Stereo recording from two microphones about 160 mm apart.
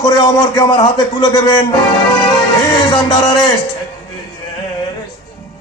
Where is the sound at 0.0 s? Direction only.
25° left (ahead or behind).